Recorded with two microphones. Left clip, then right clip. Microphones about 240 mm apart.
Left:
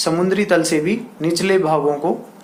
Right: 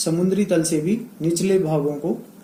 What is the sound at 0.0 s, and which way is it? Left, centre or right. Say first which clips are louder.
Speech: left 4 dB; left.